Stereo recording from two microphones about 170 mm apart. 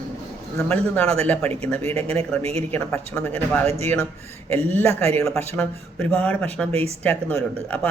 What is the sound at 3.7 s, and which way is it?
Speech, 40° right (ahead or behind).